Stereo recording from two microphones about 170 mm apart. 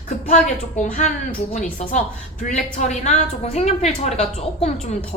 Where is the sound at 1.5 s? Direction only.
45° left (ahead or behind).